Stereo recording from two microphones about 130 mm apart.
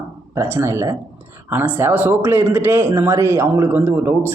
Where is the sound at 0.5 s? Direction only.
20° right (ahead or behind).